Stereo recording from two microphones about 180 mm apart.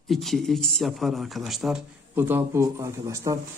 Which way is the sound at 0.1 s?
Centre (ahead or behind).